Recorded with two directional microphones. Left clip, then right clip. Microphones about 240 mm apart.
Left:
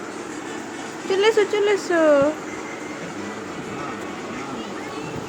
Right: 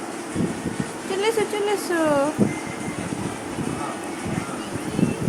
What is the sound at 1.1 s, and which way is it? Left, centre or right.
Speech, centre.